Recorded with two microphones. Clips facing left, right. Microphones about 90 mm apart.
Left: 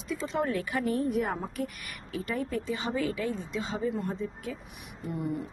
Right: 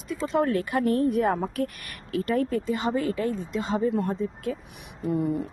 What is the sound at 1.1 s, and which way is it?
A woman's voice, 70° right (ahead or behind).